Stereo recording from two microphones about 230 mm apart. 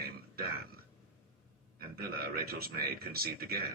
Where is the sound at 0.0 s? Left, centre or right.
Right.